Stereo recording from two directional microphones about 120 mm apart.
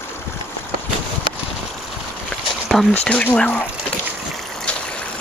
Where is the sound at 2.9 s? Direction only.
10° left (ahead or behind).